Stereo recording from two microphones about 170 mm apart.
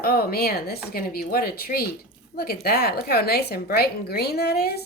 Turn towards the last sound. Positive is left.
turn(degrees=65)  # may be behind; listen again after turning